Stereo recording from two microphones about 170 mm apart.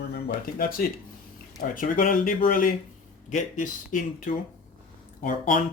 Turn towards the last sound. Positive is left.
turn(degrees=50)  # may be behind; listen again after turning